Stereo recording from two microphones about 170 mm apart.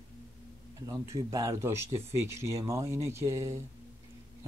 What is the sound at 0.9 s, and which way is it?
Speech, 20° right (ahead or behind).